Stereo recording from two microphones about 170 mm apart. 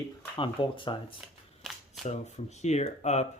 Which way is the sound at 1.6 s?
Centre (ahead or behind).